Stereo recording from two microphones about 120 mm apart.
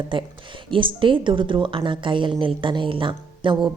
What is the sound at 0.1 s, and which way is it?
Speech, 45° right (ahead or behind).